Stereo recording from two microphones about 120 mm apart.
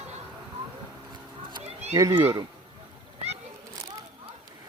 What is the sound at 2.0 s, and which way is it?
Speech, 30° right (ahead or behind).